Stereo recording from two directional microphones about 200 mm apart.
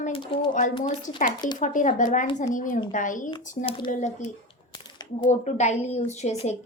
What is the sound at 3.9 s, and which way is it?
A woman's voice, 35° left (ahead or behind).